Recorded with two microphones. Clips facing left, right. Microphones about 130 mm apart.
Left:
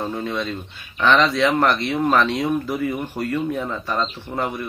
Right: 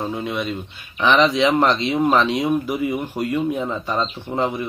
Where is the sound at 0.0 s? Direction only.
10° right (ahead or behind).